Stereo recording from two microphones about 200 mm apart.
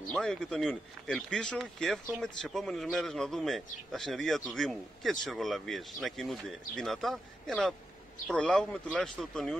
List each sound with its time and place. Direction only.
0.1 s speech: 5° left (ahead or behind)